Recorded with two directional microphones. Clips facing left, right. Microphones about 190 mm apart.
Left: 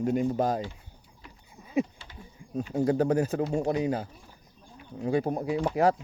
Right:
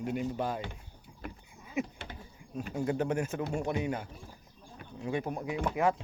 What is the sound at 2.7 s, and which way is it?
Speech, 35° left (ahead or behind).